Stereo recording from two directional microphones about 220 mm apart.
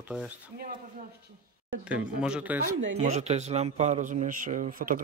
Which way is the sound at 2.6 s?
75° right (ahead or behind).